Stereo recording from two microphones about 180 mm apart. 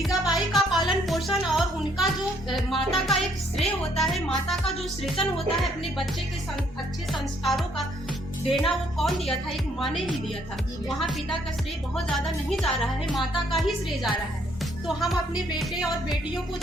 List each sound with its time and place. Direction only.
0.0 s music: centre (ahead or behind)
4.7 s speech: 35° left (ahead or behind)
5.2 s speech: centre (ahead or behind)
7.1 s speech: centre (ahead or behind)
11.9 s speech: centre (ahead or behind)